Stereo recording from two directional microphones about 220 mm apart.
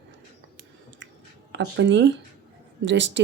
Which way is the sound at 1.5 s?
55° right (ahead or behind).